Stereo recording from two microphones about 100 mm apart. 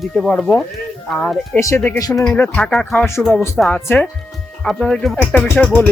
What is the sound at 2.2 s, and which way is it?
Speech, 15° left (ahead or behind).